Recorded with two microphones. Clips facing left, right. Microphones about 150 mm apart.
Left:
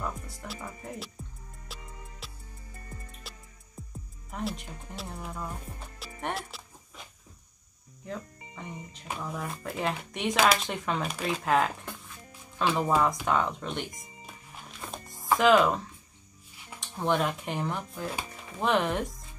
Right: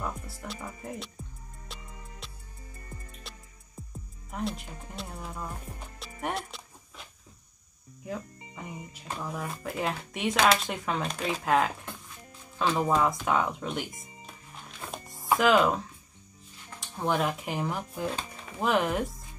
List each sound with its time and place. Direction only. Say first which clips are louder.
0.0 s music: even; centre (ahead or behind)
4.3 s speech: right 1 dB; centre (ahead or behind)
5.9 s music: right 1 dB; centre (ahead or behind)
8.0 s speech: right 2 dB; 5° right (ahead or behind)
13.2 s music: even; 5° right (ahead or behind)
15.3 s speech: left 1 dB; centre (ahead or behind)
16.9 s speech: even; centre (ahead or behind)